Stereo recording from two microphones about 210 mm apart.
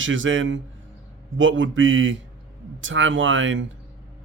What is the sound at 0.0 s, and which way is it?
Speech, 65° right (ahead or behind).